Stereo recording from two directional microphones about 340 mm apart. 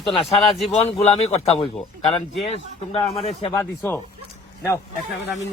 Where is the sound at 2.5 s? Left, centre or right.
Centre.